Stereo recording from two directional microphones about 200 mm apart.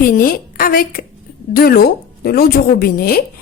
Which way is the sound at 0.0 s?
45° left (ahead or behind).